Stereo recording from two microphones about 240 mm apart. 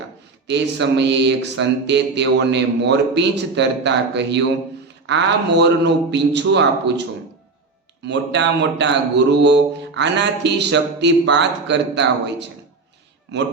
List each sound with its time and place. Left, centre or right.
0.4 s speech: right
8.0 s speech: right